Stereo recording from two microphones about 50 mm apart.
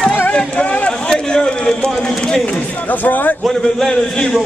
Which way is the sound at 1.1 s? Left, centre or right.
Centre.